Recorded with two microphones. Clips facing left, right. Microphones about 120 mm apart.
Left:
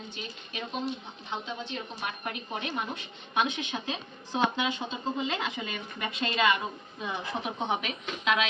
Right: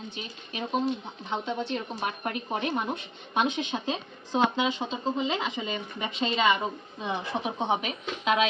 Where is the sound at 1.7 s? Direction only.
40° right (ahead or behind).